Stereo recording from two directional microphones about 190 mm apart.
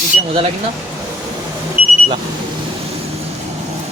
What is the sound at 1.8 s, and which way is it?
Vehicle, 5° right (ahead or behind).